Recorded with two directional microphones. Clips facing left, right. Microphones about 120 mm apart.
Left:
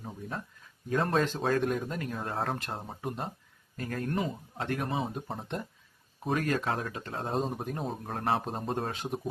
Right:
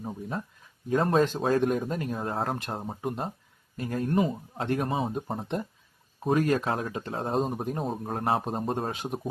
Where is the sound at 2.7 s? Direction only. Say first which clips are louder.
Right 4 dB; 10° right (ahead or behind).